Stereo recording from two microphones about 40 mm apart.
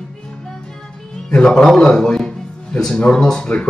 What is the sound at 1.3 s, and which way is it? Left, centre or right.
Speech, left.